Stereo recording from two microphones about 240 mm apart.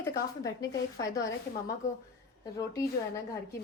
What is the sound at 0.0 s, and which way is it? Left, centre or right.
A woman's voice, centre.